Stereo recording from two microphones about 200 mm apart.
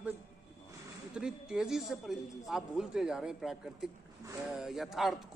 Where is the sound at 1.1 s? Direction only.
5° right (ahead or behind).